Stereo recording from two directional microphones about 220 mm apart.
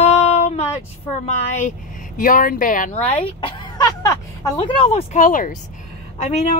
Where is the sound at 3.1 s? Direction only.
25° left (ahead or behind).